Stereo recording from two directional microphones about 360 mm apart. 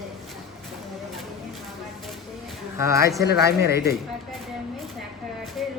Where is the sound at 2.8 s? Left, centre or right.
Centre.